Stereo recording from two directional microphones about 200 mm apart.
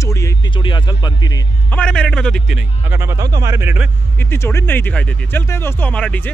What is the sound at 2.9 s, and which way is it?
Speech, 15° right (ahead or behind).